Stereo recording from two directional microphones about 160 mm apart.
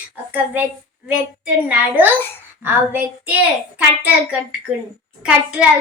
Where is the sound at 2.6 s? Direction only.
10° right (ahead or behind).